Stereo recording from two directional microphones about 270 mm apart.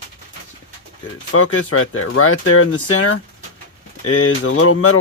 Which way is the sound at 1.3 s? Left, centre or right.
Left.